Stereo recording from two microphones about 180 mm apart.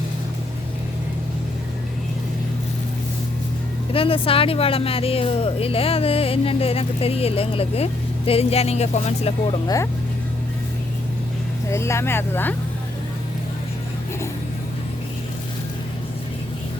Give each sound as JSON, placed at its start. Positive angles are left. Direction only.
{"t": 3.9, "sound": "speech", "side_deg": 30}
{"t": 9.6, "sound": "speech", "side_deg": 15}
{"t": 11.7, "sound": "speech", "side_deg": 15}